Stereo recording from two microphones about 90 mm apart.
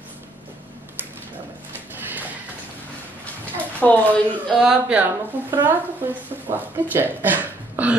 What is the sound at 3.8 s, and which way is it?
Speech, 15° left (ahead or behind).